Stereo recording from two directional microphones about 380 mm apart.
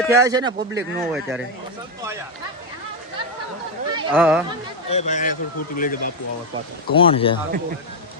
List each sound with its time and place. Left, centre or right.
0.0 s speech: centre
3.9 s speech: centre
4.9 s speech: centre